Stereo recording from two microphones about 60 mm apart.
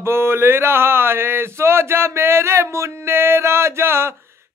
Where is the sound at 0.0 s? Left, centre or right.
Right.